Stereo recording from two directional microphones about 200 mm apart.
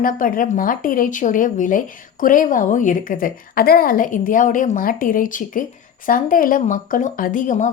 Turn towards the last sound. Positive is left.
turn(degrees=40)  # may be behind; listen again after turning